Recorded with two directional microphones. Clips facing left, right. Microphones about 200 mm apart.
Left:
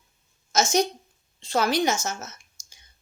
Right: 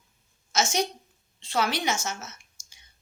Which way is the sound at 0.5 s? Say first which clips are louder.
Left 4 dB; 40° left (ahead or behind).